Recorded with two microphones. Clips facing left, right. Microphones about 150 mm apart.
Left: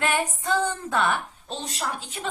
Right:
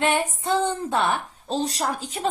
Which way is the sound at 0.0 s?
25° right (ahead or behind).